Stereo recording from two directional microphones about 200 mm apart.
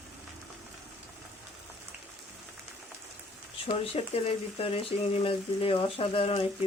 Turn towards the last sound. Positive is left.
turn(degrees=30)  # may be behind; listen again after turning